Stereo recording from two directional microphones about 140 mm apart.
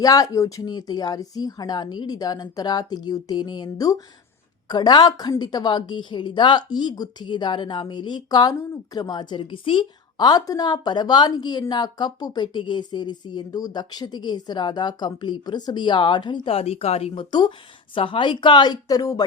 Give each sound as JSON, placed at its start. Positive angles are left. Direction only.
{"t": 0.0, "sound": "a woman's voice", "side_deg": 25}